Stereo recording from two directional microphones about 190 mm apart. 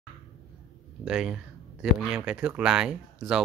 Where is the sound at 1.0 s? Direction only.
5° right (ahead or behind).